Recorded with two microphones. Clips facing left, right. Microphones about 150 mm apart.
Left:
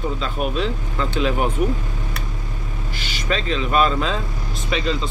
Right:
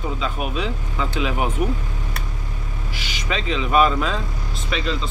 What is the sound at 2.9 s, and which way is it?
Speech, 10° right (ahead or behind).